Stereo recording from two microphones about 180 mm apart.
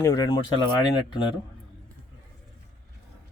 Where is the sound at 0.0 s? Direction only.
20° left (ahead or behind).